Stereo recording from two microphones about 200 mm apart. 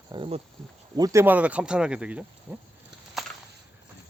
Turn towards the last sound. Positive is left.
turn(degrees=0)  # may be behind; listen again after turning